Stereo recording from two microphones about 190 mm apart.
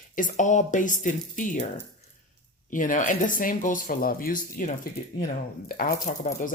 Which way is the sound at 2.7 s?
45° left (ahead or behind).